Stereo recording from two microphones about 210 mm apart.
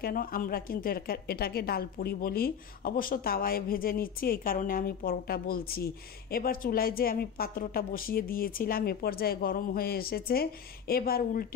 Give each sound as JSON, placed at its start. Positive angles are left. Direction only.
{"t": 0.0, "sound": "a woman's voice", "side_deg": 45}